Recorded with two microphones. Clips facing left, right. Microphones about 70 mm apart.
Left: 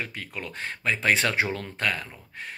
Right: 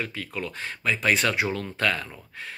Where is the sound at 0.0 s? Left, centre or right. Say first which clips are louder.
Right 3 dB; left.